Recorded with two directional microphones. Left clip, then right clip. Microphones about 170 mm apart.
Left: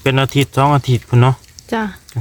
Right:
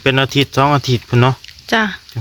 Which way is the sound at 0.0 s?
Centre (ahead or behind).